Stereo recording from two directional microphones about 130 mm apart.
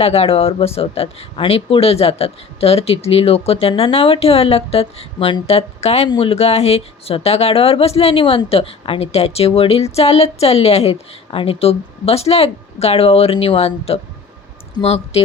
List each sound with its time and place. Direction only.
0.0 s speech: 50° left (ahead or behind)
6.1 s speech: 45° left (ahead or behind)